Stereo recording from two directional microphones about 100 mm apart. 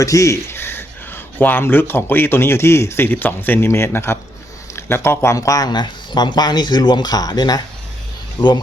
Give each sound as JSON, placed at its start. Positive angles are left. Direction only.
{"t": 0.0, "sound": "speech", "side_deg": 30}